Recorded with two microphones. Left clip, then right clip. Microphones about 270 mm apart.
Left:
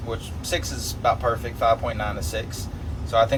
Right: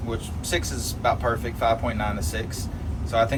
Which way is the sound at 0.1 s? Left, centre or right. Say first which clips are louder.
Even; centre.